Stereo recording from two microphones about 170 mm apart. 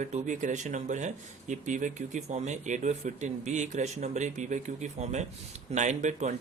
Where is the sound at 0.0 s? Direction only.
45° right (ahead or behind).